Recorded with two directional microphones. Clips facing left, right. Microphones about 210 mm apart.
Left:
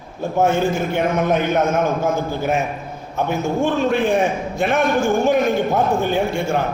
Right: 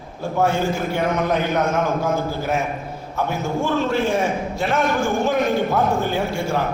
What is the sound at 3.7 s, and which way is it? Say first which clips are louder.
A man's voice: left 2 dB; 20° left (ahead or behind).